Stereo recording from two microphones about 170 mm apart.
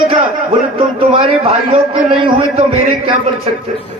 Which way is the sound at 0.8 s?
30° right (ahead or behind).